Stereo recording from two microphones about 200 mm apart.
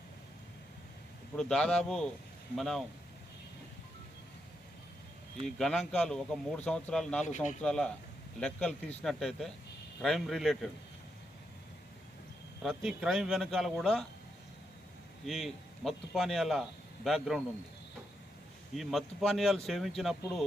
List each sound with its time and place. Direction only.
1.4 s a man's voice: 5° left (ahead or behind)
5.5 s a man's voice: centre (ahead or behind)
7.3 s speech: 35° left (ahead or behind)
7.6 s a man's voice: 5° left (ahead or behind)
12.6 s a man's voice: 5° right (ahead or behind)
15.3 s a man's voice: centre (ahead or behind)
18.7 s a man's voice: centre (ahead or behind)